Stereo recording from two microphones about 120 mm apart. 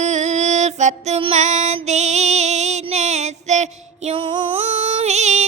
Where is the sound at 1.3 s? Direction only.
85° right.